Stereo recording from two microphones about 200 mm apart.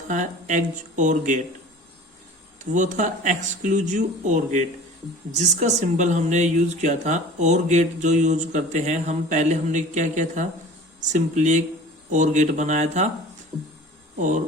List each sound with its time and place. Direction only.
0.1 s speech: 40° right (ahead or behind)
2.7 s speech: 40° right (ahead or behind)
14.2 s speech: 40° right (ahead or behind)